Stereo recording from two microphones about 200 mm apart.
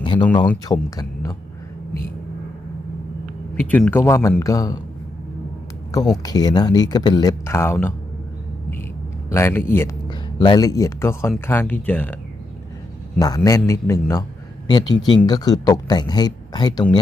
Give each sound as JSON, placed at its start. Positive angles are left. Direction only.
{"t": 0.0, "sound": "a sound", "side_deg": 25}
{"t": 0.6, "sound": "speech", "side_deg": 20}
{"t": 3.5, "sound": "speech", "side_deg": 10}
{"t": 5.9, "sound": "speech", "side_deg": 20}
{"t": 9.3, "sound": "speech", "side_deg": 10}
{"t": 13.1, "sound": "speech", "side_deg": 20}